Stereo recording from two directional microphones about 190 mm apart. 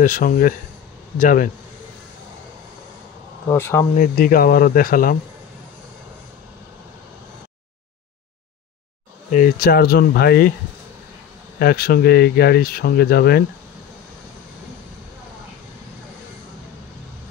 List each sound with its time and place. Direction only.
0.0 s speech: 45° left (ahead or behind)
3.4 s speech: 15° left (ahead or behind)
3.9 s speech: 45° left (ahead or behind)
9.3 s speech: 50° left (ahead or behind)
11.6 s speech: 50° left (ahead or behind)